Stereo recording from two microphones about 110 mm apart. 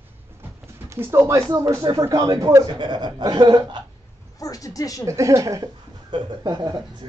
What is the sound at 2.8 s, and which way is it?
Speech, 40° right (ahead or behind).